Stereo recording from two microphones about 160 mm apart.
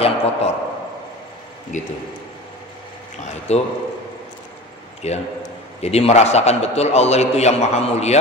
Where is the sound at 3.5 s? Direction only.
40° left (ahead or behind).